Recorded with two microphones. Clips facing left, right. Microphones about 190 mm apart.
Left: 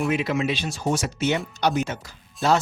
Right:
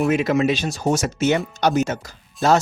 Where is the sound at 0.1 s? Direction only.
45° right (ahead or behind).